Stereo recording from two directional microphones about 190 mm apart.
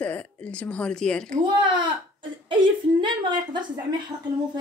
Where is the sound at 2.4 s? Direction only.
25° right (ahead or behind).